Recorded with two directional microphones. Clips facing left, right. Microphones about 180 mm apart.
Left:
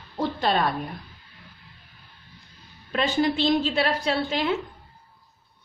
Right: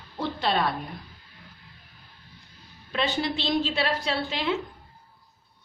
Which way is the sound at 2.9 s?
45° left (ahead or behind).